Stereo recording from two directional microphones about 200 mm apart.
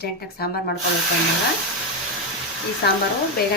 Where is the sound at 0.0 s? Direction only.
50° left (ahead or behind).